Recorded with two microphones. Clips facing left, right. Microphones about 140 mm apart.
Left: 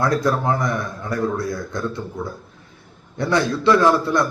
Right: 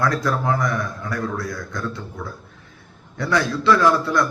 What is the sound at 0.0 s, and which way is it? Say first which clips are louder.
Speech: left 2 dB; 25° left (ahead or behind).